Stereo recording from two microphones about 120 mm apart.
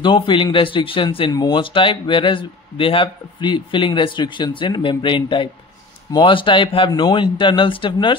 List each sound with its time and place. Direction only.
0.0 s speech: 45° left (ahead or behind)